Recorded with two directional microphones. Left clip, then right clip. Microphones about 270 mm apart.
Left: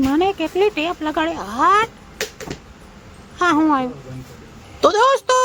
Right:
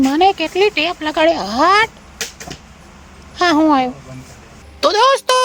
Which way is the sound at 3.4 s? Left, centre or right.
Right.